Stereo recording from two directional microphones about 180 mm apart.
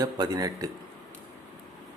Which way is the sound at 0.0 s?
20° right (ahead or behind).